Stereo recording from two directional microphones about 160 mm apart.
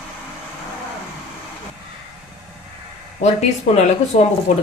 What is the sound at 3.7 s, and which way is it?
Speech, 45° left (ahead or behind).